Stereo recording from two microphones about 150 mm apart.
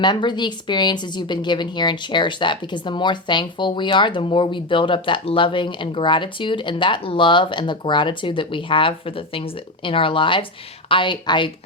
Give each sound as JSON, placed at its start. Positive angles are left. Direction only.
{"t": 0.0, "sound": "speech", "side_deg": 30}